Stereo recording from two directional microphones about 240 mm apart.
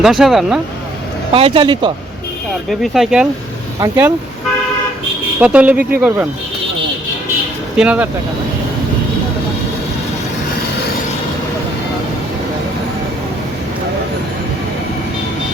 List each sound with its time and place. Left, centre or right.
0.0 s speech: centre
1.3 s speech: right
2.6 s speech: centre
5.4 s speech: centre
7.8 s speech: centre